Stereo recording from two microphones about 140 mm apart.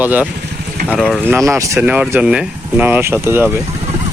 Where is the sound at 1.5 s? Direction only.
20° right (ahead or behind).